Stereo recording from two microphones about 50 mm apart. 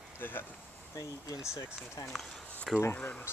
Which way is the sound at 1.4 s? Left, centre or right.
Left.